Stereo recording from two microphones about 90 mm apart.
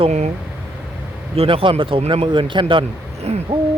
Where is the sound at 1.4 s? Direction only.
85° right; by 2.8 s 70° right (ahead or behind).